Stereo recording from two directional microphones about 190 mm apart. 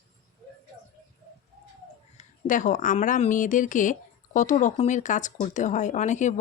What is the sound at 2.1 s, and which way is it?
Speech, 45° left (ahead or behind).